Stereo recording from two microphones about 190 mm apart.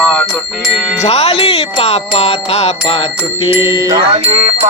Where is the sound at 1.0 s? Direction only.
35° left (ahead or behind).